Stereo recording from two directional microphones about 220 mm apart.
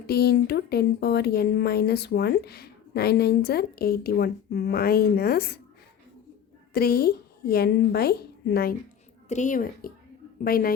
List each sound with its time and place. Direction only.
0.1 s speech: 45° left (ahead or behind)
6.7 s a woman's voice: 45° left (ahead or behind)
9.3 s a woman's voice: 35° left (ahead or behind)